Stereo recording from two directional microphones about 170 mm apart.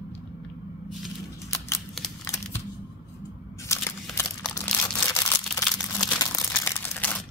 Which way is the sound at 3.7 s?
15° left (ahead or behind).